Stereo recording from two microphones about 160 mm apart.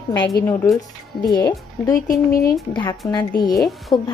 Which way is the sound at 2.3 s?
70° left (ahead or behind).